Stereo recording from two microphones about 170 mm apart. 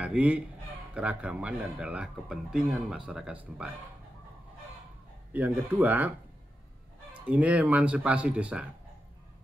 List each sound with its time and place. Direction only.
0.0 s speech: 5° right (ahead or behind)
5.3 s speech: 10° right (ahead or behind)
7.2 s speech: 10° right (ahead or behind)